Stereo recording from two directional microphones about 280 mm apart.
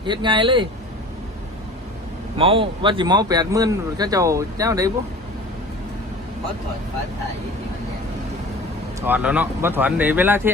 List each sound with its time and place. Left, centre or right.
0.0 s speech: centre
2.4 s speech: centre
9.0 s speech: centre